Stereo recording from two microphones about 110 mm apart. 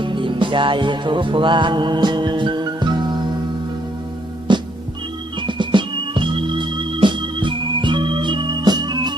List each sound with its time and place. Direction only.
0.0 s music: 50° right (ahead or behind)
4.5 s music: 45° right (ahead or behind)
5.4 s organ: 45° right (ahead or behind)